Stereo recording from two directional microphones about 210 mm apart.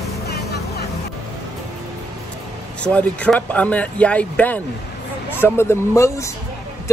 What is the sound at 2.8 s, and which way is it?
Speech, 5° left (ahead or behind).